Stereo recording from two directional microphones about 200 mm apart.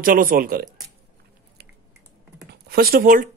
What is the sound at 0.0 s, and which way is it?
Speech, 45° right (ahead or behind).